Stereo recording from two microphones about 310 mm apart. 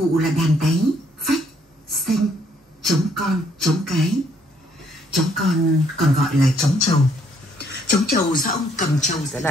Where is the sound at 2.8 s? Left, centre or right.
Centre.